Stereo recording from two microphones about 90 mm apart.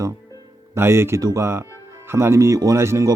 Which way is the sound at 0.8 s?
30° right (ahead or behind).